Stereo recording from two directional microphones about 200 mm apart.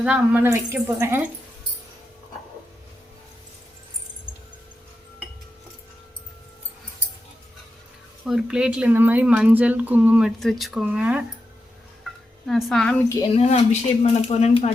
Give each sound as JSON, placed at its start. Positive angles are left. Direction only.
{"t": 0.0, "sound": "speech", "side_deg": -5}
{"t": 8.3, "sound": "speech", "side_deg": -5}
{"t": 12.5, "sound": "speech", "side_deg": 0}
{"t": 13.3, "sound": "speech", "side_deg": 35}